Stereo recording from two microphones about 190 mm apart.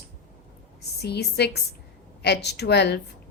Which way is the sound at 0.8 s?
60° left (ahead or behind).